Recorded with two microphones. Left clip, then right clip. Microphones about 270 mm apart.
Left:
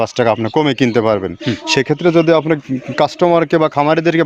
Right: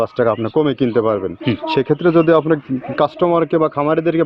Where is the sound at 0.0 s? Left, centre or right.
Left.